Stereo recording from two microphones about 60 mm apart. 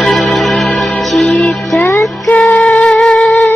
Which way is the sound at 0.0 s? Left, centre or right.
Centre.